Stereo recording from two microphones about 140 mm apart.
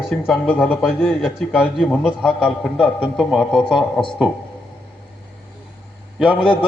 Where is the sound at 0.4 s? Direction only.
10° left (ahead or behind).